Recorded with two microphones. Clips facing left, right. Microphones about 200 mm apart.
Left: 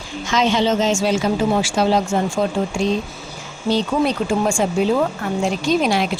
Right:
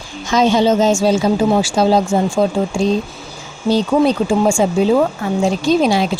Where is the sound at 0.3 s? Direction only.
40° right (ahead or behind).